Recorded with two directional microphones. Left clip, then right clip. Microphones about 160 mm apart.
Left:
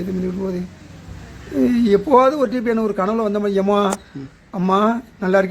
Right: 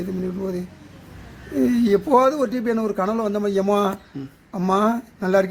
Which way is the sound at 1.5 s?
10° right (ahead or behind).